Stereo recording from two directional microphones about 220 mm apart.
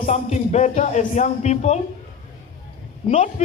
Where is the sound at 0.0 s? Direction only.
30° left (ahead or behind).